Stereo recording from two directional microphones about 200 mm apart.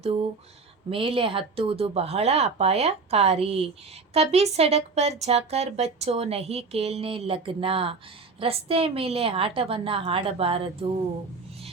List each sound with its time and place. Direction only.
0.9 s speech: 25° right (ahead or behind)